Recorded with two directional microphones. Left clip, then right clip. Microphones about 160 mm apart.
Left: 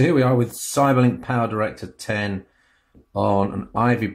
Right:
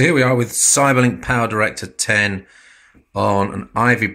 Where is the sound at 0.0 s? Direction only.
5° right (ahead or behind).